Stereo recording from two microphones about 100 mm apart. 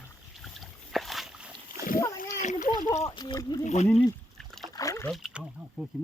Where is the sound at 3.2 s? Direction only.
45° left (ahead or behind).